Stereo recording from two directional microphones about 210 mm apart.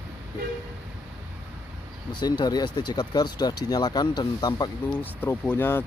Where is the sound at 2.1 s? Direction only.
20° left (ahead or behind).